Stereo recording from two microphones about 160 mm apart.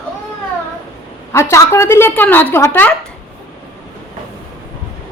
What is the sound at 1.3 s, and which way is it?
A woman's voice, 15° left (ahead or behind).